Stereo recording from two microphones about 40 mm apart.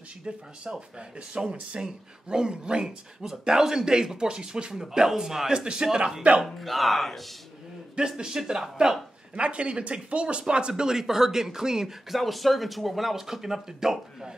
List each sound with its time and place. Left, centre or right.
0.7 s speech: right
6.4 s speech: centre
8.2 s speech: centre
9.3 s speech: right
10.7 s speech: centre
12.2 s speech: centre